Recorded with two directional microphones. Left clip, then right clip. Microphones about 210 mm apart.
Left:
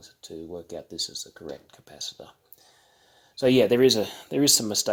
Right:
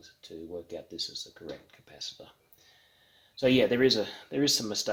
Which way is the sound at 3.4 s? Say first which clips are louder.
Left 5 dB; 45° left (ahead or behind).